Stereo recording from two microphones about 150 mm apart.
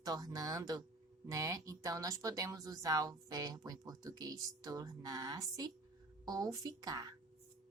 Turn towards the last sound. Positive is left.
turn(degrees=-25)  # may be behind; listen again after turning